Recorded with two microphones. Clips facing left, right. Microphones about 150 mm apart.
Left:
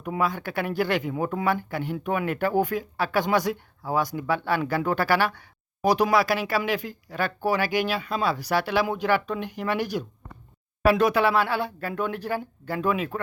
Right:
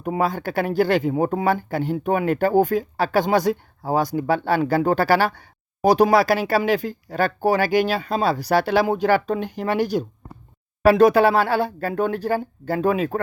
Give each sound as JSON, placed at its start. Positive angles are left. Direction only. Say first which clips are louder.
{"t": 0.0, "sound": "speech", "louder": "right 4 dB", "side_deg": -35}